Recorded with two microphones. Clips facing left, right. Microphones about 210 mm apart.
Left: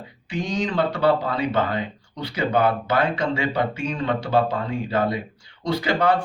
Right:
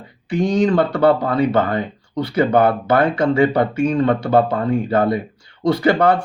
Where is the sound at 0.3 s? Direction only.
55° right (ahead or behind).